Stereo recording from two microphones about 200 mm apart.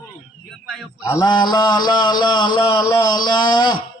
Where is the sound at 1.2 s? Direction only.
20° left (ahead or behind).